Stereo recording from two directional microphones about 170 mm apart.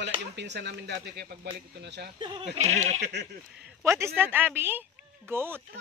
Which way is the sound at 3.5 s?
10° right (ahead or behind).